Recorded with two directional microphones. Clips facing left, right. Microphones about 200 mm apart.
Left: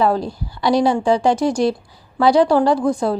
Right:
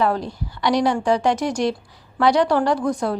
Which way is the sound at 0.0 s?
30° left (ahead or behind).